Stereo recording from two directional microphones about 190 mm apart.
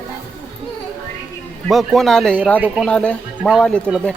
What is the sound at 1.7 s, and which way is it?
Speech, centre (ahead or behind).